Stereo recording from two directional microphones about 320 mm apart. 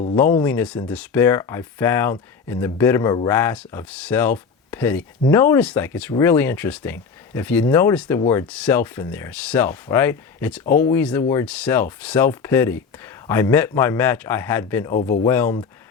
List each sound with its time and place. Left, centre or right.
0.2 s speech: centre
14.9 s speech: left
15.3 s speech: centre